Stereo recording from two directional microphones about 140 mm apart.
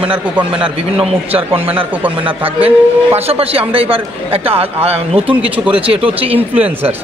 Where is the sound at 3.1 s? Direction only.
45° right (ahead or behind).